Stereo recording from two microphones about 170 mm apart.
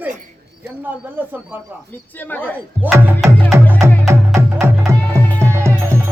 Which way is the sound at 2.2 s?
10° left (ahead or behind).